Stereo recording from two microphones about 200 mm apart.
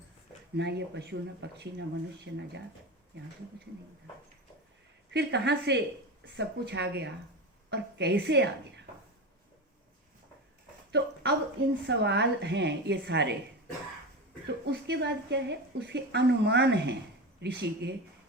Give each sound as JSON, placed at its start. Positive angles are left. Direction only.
{"t": 0.5, "sound": "a woman's voice", "side_deg": -60}
{"t": 5.1, "sound": "a woman's voice", "side_deg": -55}
{"t": 10.9, "sound": "a sound", "side_deg": -60}
{"t": 11.9, "sound": "a woman's voice", "side_deg": -60}
{"t": 14.4, "sound": "a woman's voice", "side_deg": -60}